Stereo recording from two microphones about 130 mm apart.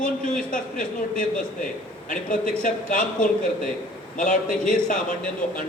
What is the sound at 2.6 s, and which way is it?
Speech, 90° left.